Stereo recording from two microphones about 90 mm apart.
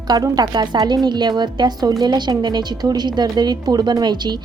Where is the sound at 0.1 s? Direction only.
45° right (ahead or behind).